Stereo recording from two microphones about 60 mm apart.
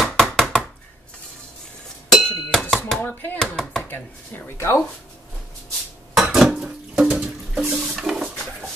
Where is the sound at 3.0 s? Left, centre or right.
Left.